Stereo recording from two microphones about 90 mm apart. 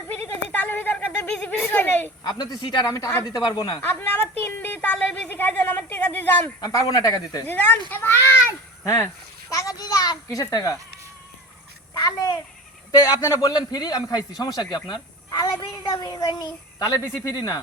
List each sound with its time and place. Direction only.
0.1 s a sound: 20° left (ahead or behind)
1.5 s a woman's voice: 25° left (ahead or behind)
2.2 s speech: 50° left (ahead or behind)
2.8 s a man's voice: 40° left (ahead or behind)
3.8 s a woman's voice: 20° left (ahead or behind)
6.6 s a man's voice: 45° left (ahead or behind)
7.4 s a woman's voice: 20° left (ahead or behind); by 10.8 s 40° left (ahead or behind)
11.9 s a child's voice: 40° left (ahead or behind)